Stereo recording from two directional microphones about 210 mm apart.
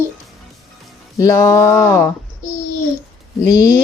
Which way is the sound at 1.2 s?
15° left (ahead or behind).